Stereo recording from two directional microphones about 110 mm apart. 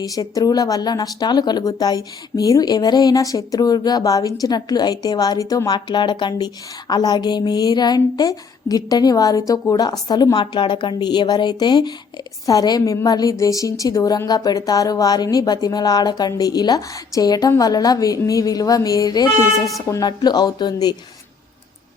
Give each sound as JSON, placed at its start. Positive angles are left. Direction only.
{"t": 0.0, "sound": "speech", "side_deg": 35}